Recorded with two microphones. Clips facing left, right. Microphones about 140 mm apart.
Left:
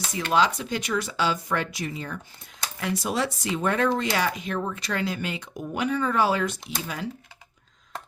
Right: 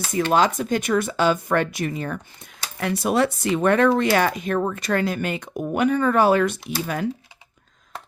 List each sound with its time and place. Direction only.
0.1 s speech: 50° right (ahead or behind)